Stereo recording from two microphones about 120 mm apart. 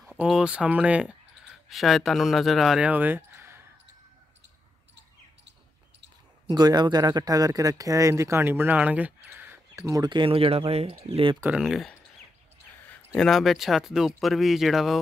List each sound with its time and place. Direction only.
0.0 s speech: centre (ahead or behind)
1.7 s speech: centre (ahead or behind); by 3.6 s 20° right (ahead or behind)
6.5 s speech: 35° right (ahead or behind); by 11.3 s 50° right (ahead or behind)
11.4 s speech: 5° right (ahead or behind)
13.1 s speech: 5° left (ahead or behind)